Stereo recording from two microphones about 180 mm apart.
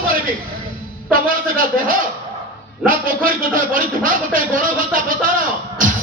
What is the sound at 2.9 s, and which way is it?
Speech, 50° right (ahead or behind).